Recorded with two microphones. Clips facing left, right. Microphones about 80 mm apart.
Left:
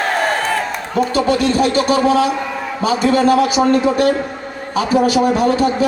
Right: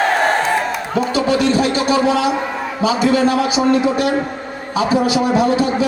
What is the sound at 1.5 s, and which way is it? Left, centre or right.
A man's voice, left.